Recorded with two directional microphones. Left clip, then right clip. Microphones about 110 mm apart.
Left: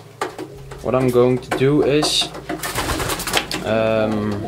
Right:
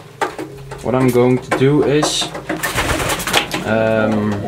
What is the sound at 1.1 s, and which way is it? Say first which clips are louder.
Speech: right 2 dB; 10° left (ahead or behind).